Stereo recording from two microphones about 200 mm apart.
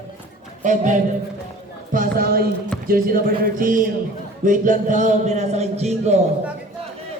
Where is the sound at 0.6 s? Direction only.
40° right (ahead or behind).